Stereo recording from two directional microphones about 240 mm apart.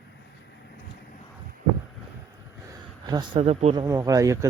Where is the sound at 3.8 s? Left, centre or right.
Centre.